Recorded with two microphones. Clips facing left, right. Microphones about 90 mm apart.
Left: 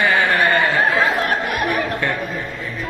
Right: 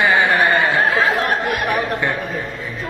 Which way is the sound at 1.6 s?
15° right (ahead or behind).